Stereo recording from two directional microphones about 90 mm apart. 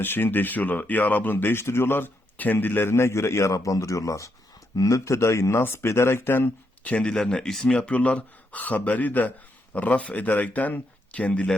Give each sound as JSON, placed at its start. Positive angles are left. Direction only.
{"t": 0.0, "sound": "speech", "side_deg": 25}
{"t": 6.9, "sound": "speech", "side_deg": 10}